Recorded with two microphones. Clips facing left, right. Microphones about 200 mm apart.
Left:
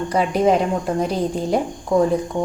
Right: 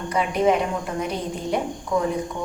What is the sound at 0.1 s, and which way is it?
A woman's voice, 35° left (ahead or behind).